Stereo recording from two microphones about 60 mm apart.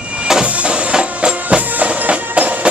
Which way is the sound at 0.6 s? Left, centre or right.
Centre.